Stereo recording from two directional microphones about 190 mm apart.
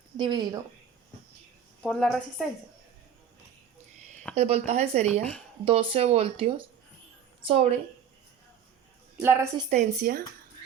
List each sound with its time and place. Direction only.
0.2 s speech: 25° right (ahead or behind)
1.8 s a woman's voice: centre (ahead or behind)
4.4 s a woman's voice: 35° right (ahead or behind)
9.1 s a woman's voice: 10° right (ahead or behind)
9.6 s speech: 40° right (ahead or behind)